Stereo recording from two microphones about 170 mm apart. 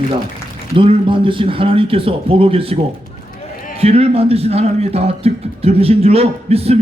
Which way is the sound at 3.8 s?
35° right (ahead or behind).